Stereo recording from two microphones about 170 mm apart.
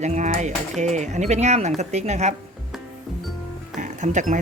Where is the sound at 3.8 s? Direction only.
45° right (ahead or behind).